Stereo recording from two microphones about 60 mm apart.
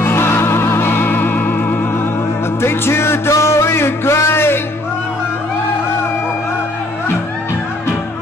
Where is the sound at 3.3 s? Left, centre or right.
Left.